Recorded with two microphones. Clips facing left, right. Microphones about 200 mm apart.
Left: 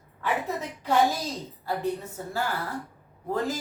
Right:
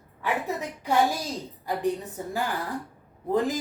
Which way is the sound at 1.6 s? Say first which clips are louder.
Right 2 dB; 15° right (ahead or behind).